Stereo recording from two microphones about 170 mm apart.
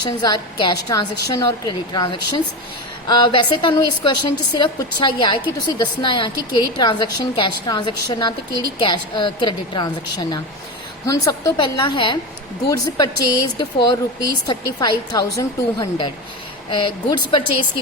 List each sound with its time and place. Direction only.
0.0 s a woman's voice: 25° left (ahead or behind)